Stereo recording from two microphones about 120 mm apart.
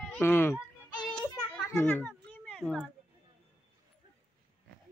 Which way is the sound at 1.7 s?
20° left (ahead or behind).